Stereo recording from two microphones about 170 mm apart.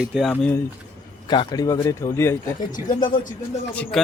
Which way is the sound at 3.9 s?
Centre (ahead or behind).